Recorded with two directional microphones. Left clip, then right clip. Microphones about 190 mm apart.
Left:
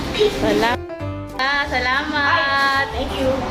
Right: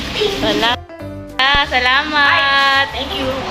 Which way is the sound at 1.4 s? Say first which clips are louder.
Right 6 dB; 20° right (ahead or behind).